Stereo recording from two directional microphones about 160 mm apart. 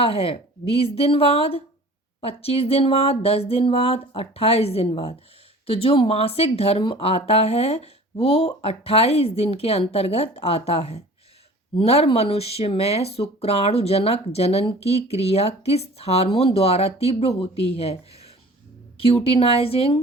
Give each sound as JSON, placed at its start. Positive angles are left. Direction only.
{"t": 0.0, "sound": "speech", "side_deg": 35}